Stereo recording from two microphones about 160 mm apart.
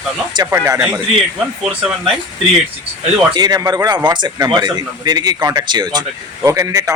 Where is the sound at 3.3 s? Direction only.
25° right (ahead or behind).